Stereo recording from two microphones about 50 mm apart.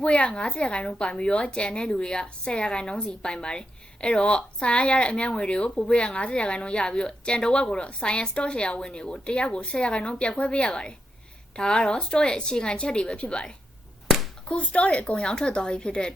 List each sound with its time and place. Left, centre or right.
0.0 s a woman's voice: left